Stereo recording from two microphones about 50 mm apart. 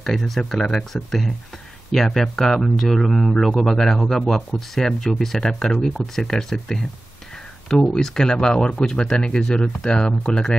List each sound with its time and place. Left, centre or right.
0.0 s speech: centre
7.9 s speech: centre